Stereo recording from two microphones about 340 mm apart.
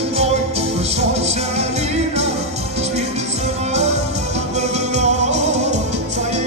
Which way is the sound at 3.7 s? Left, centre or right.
Centre.